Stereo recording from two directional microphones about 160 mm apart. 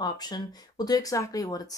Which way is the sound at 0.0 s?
25° left (ahead or behind).